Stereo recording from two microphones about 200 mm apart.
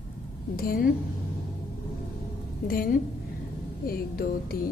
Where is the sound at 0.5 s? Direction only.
45° left (ahead or behind).